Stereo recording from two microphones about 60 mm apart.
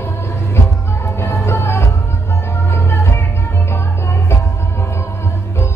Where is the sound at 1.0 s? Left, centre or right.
Left.